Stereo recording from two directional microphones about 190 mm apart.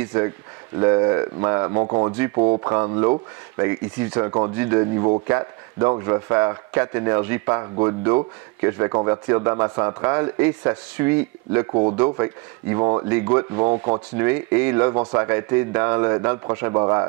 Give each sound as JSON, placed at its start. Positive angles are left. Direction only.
{"t": 0.0, "sound": "speech", "side_deg": -15}
{"t": 11.7, "sound": "speech", "side_deg": -30}
{"t": 14.2, "sound": "speech", "side_deg": -15}